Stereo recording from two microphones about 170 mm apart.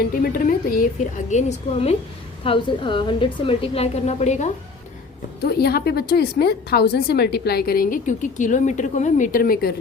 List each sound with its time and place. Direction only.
0.0 s a woman's voice: 60° left (ahead or behind)
1.3 s a woman's voice: 45° left (ahead or behind)
5.4 s a woman's voice: 65° left (ahead or behind)